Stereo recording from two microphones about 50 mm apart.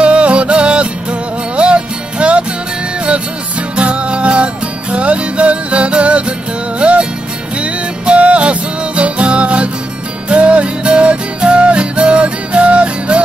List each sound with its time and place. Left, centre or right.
0.0 s music: right
3.7 s music: right